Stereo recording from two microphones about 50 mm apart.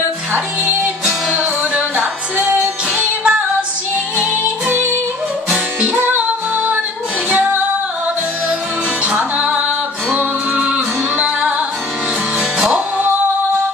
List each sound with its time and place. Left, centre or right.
1.3 s music: right
5.8 s music: right
9.0 s music: right
12.4 s music: right